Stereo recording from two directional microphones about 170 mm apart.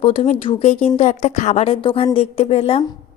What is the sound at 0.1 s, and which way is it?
Speech, 45° left (ahead or behind).